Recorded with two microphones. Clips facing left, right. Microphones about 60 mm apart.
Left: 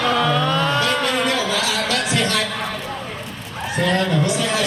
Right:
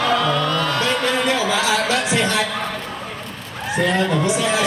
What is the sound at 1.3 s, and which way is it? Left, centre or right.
Music, right.